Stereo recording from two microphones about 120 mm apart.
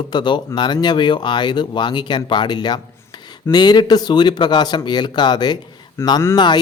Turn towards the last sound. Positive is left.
turn(degrees=40)  # may be behind; listen again after turning